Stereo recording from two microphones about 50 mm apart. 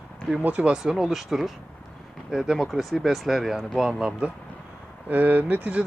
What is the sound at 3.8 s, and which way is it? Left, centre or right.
Speech, centre.